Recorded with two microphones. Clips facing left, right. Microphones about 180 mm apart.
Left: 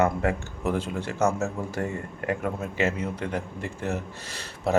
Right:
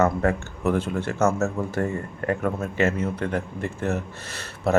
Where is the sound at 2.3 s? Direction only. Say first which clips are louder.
Right 3 dB; 50° right (ahead or behind).